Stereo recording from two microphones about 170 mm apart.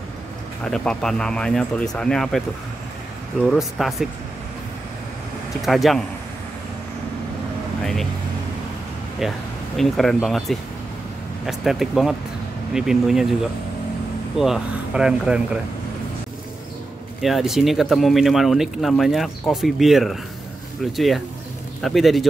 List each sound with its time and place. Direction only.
0.7 s speech: 5° left (ahead or behind)
3.4 s speech: centre (ahead or behind)
5.6 s speech: centre (ahead or behind)
7.8 s speech: centre (ahead or behind)
9.2 s speech: centre (ahead or behind)
14.4 s speech: 5° right (ahead or behind)
17.2 s speech: centre (ahead or behind)